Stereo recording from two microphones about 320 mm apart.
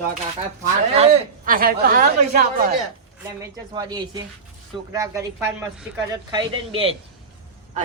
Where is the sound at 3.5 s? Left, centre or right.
Centre.